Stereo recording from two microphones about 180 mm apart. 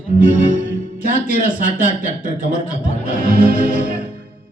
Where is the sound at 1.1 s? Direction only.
45° left (ahead or behind).